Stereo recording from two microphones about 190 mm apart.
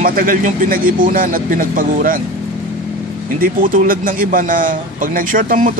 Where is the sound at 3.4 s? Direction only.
45° right (ahead or behind).